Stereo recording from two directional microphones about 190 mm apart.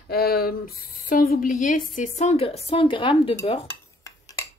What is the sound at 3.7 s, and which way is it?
Dishes, 15° left (ahead or behind).